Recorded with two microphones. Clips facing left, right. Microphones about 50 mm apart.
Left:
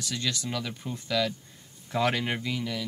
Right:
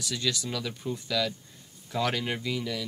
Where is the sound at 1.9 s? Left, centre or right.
Left.